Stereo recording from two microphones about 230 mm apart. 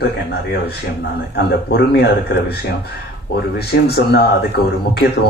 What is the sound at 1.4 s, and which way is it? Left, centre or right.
Speech, left.